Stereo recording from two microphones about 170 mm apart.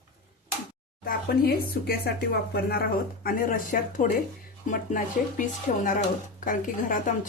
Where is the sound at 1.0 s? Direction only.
60° left (ahead or behind).